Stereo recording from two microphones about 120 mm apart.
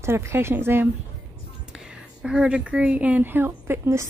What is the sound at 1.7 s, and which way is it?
A woman's voice, 5° right (ahead or behind).